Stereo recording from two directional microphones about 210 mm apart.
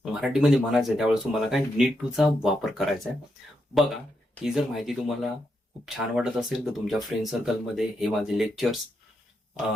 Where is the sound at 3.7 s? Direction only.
Centre (ahead or behind).